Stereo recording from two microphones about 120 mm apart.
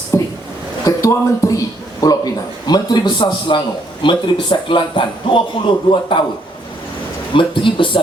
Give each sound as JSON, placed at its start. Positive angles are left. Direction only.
{"t": 0.1, "sound": "a sound", "side_deg": 20}
{"t": 0.9, "sound": "a man's voice", "side_deg": 30}
{"t": 7.3, "sound": "speech", "side_deg": 45}